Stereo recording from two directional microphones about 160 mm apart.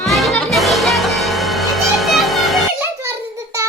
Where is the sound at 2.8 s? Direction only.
15° right (ahead or behind).